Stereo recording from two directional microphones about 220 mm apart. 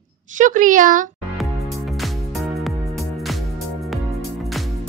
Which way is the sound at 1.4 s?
Centre (ahead or behind).